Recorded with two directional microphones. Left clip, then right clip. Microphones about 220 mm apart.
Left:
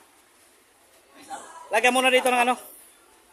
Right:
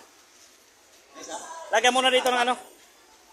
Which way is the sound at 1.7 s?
25° left (ahead or behind).